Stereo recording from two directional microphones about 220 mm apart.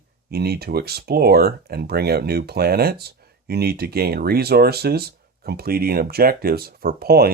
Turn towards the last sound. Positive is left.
turn(degrees=-45)  # may be behind; listen again after turning